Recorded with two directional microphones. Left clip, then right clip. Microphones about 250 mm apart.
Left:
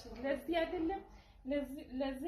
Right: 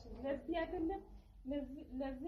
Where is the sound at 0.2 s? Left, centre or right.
Left.